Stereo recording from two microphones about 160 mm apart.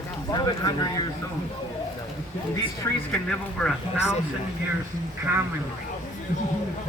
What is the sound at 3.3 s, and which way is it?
Speech, 5° left (ahead or behind).